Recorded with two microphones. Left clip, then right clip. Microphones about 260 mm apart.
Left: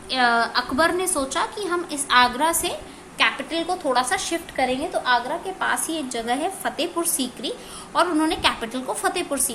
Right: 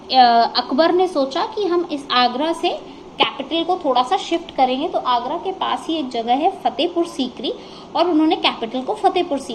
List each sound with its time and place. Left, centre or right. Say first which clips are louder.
0.1 s a woman's voice: right 7 dB; centre